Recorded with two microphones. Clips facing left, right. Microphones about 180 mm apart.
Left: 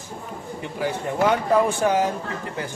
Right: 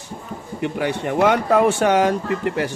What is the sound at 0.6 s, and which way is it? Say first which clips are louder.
Speech: right 5 dB; 70° right (ahead or behind).